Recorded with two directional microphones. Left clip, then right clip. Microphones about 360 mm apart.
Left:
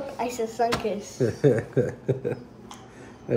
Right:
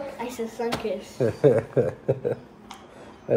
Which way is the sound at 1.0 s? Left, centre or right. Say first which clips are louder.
Right 2 dB; centre.